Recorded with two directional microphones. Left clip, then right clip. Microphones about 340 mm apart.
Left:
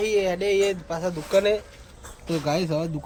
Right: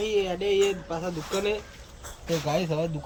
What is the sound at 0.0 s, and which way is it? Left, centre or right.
Speech, centre.